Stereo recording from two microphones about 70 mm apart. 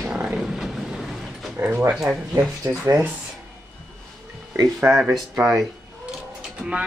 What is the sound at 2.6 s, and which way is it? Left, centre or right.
Speech, right.